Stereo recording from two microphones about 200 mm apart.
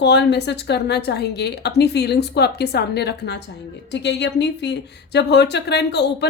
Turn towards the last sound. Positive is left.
turn(degrees=55)  # may be behind; listen again after turning